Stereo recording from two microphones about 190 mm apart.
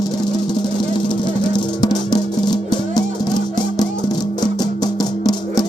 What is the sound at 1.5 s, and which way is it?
Music, 20° left (ahead or behind).